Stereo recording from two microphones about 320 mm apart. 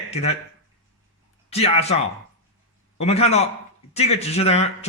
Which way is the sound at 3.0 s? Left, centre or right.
Centre.